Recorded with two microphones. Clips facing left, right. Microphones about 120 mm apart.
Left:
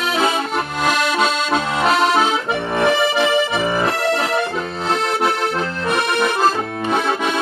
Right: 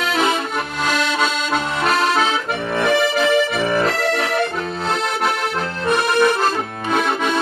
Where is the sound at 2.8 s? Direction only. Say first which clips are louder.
Even; 25° left (ahead or behind).